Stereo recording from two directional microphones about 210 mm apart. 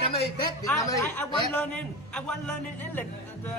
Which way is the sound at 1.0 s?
5° left (ahead or behind).